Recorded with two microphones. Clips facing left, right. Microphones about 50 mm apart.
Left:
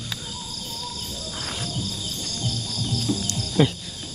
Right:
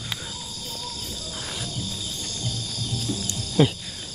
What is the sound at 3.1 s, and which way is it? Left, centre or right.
Cricket, left.